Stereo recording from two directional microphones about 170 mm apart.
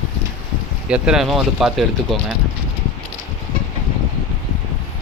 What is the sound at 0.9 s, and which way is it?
Speech, 5° right (ahead or behind).